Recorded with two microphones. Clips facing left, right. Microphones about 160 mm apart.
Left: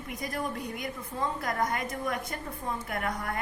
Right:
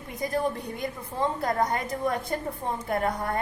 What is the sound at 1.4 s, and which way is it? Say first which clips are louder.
A woman's voice: right 4 dB; 25° right (ahead or behind).